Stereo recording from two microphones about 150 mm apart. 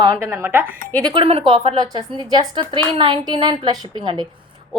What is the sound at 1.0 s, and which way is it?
A woman's voice, 35° right (ahead or behind).